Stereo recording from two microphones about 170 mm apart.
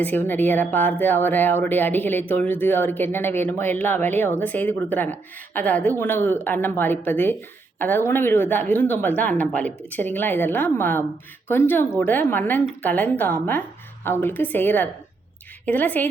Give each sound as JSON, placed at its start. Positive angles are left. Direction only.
{"t": 0.0, "sound": "speech", "side_deg": 10}